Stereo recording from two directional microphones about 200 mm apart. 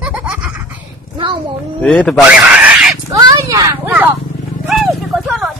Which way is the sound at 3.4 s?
15° right (ahead or behind).